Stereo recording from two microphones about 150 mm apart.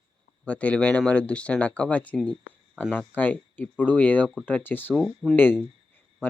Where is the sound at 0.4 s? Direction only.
10° left (ahead or behind).